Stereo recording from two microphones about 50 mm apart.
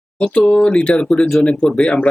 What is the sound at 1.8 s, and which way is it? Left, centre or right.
Speech, left.